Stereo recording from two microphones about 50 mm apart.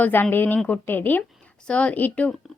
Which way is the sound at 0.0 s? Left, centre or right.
Left.